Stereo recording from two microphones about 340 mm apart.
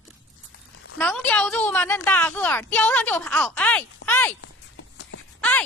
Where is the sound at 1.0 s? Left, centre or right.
Centre.